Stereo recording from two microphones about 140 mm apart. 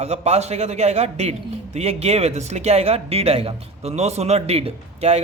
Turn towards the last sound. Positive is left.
turn(degrees=-50)  # may be behind; listen again after turning